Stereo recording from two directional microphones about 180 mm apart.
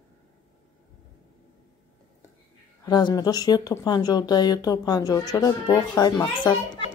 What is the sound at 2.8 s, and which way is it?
Speech, 20° left (ahead or behind).